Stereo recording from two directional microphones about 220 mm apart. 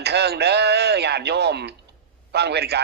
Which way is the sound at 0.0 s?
50° right (ahead or behind).